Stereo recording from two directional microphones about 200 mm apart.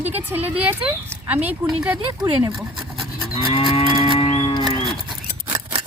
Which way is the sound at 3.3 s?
30° left (ahead or behind).